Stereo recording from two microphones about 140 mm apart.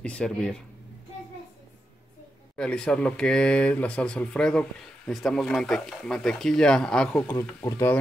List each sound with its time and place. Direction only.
0.0 s speech: 5° left (ahead or behind)
2.5 s speech: 5° left (ahead or behind)
7.3 s speech: 20° left (ahead or behind)